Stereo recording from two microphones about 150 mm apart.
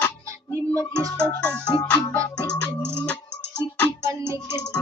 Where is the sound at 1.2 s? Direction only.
10° left (ahead or behind).